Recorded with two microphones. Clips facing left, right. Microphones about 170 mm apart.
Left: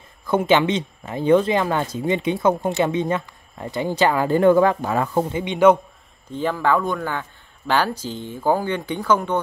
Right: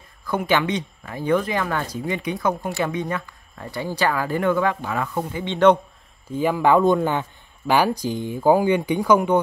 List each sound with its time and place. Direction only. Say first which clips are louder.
0.3 s speech: left 4 dB; 25° left (ahead or behind)
5.4 s a man's voice: even; 10° left (ahead or behind)
6.3 s speech: right 3 dB; 10° right (ahead or behind)